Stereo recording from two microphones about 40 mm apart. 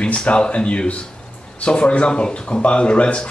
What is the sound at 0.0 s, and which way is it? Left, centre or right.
A man's voice, left.